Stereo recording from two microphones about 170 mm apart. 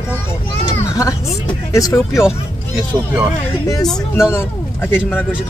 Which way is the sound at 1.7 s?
20° left (ahead or behind).